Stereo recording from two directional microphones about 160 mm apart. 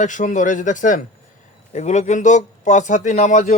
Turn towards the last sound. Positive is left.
turn(degrees=50)  # may be behind; listen again after turning